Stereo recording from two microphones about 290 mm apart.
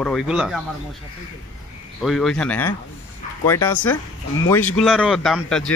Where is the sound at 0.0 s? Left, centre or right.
Centre.